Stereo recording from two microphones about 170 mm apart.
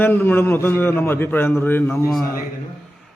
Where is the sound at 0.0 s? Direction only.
10° left (ahead or behind).